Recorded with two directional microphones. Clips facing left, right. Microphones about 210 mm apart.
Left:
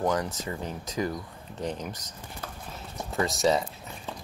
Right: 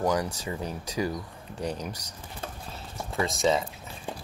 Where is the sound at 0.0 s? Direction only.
15° right (ahead or behind).